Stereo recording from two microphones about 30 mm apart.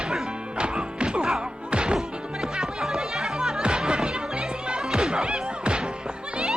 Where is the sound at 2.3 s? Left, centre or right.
Centre.